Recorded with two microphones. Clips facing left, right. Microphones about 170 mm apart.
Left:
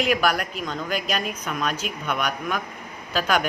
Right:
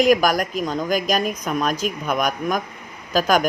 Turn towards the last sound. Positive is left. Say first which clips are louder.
# right 5 dB
turn(degrees=-40)  # may be behind; listen again after turning